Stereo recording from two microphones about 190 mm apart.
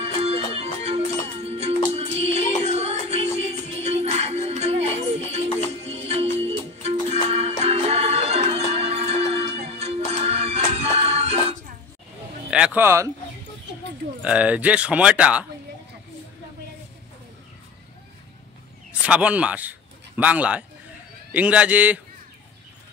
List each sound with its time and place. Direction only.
0.0 s music: 30° right (ahead or behind)
12.4 s a sound: 5° right (ahead or behind)
14.2 s speech: 5° right (ahead or behind)
18.9 s speech: 5° right (ahead or behind)